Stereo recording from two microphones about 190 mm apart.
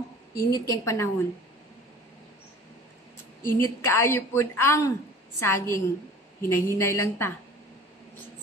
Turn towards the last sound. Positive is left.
turn(degrees=15)  # may be behind; listen again after turning